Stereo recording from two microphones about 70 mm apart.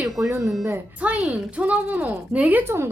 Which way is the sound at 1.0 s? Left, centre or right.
Right.